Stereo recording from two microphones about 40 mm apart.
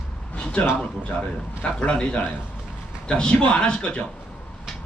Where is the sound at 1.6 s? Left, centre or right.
Left.